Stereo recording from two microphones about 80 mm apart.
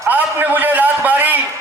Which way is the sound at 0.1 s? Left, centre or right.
Right.